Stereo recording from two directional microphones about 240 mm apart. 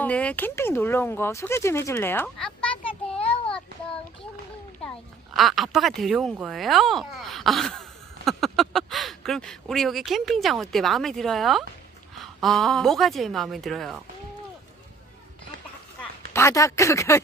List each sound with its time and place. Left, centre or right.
0.0 s speech: centre
3.2 s child singing: left
5.3 s a woman's voice: centre
16.3 s speech: centre